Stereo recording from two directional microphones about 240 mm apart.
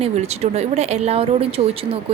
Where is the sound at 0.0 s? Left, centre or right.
Right.